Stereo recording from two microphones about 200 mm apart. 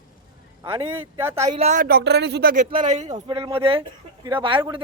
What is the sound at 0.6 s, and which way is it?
Speech, 20° right (ahead or behind).